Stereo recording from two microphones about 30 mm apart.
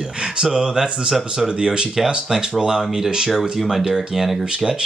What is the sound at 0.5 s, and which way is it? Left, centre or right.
A man's voice, right.